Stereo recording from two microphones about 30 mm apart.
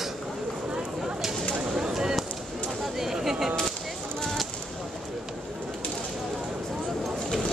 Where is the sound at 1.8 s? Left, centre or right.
Right.